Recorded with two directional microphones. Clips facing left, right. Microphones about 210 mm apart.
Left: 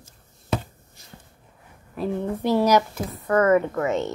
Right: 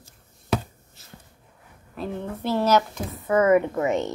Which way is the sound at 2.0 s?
10° left (ahead or behind).